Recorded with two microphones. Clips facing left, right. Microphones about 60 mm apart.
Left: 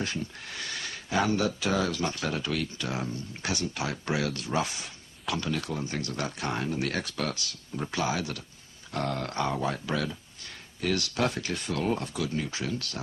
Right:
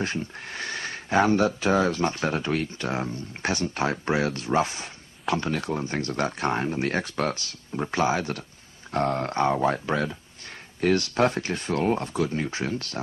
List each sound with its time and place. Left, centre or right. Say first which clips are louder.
0.0 s speech: right 4 dB; right